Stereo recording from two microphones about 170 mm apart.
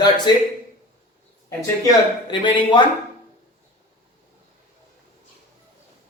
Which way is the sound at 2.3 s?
25° left (ahead or behind).